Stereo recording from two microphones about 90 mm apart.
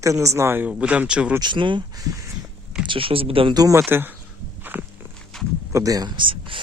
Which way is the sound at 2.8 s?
75° right (ahead or behind).